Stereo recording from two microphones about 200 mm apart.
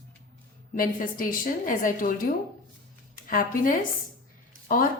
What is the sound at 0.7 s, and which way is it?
A woman's voice, 45° left (ahead or behind).